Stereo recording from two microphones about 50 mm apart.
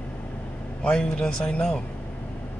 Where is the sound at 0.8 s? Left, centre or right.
Centre.